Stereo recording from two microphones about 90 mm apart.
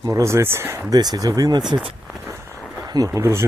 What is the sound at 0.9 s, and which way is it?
Speech, 45° right (ahead or behind).